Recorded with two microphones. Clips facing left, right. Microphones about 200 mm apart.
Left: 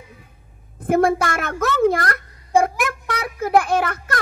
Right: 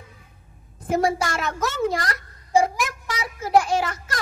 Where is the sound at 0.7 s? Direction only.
55° left (ahead or behind).